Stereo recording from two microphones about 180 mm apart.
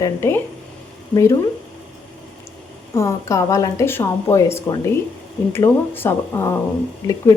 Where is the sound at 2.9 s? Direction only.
15° left (ahead or behind).